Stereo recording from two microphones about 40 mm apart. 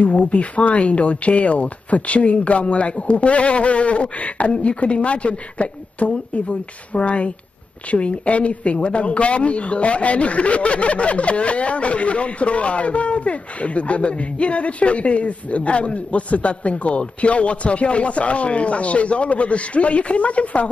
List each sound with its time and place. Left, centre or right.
0.0 s speech: left